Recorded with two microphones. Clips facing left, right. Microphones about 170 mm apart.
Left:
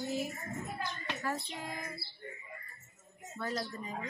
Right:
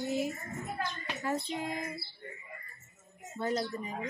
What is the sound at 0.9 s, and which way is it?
A child's voice, 20° right (ahead or behind).